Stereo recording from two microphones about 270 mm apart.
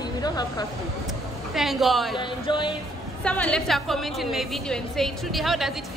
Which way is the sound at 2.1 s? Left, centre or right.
Centre.